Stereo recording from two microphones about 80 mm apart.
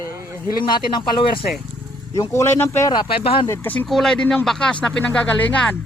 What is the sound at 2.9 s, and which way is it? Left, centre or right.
Speech, left.